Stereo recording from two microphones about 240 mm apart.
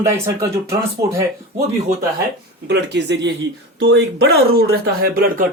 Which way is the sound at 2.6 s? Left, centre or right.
Right.